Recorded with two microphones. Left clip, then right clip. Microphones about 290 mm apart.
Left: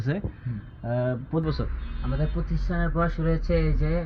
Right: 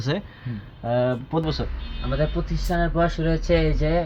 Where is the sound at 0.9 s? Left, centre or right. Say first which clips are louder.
Right 6 dB; right.